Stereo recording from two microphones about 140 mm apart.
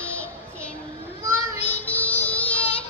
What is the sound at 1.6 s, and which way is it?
Child singing, 15° left (ahead or behind).